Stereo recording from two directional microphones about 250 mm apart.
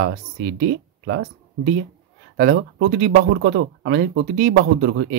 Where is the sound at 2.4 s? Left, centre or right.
Right.